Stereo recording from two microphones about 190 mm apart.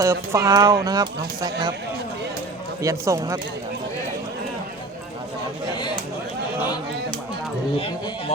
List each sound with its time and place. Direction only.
0.0 s speech: 15° right (ahead or behind)
2.8 s speech: 15° right (ahead or behind)